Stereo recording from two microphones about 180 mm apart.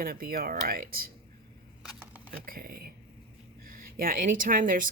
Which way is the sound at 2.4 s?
55° right (ahead or behind).